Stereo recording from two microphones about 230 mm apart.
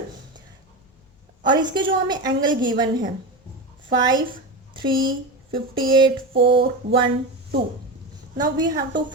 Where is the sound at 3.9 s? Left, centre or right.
Centre.